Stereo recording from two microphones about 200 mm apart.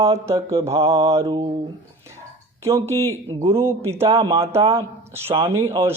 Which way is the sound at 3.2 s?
30° right (ahead or behind).